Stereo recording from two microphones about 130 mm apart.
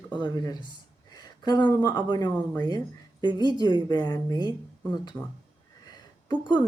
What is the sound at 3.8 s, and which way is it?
Speech, 30° left (ahead or behind).